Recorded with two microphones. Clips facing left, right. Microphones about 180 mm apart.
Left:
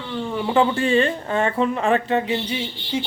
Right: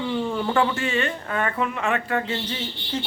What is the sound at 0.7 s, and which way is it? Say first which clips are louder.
Speech: left 6 dB; 30° left (ahead or behind).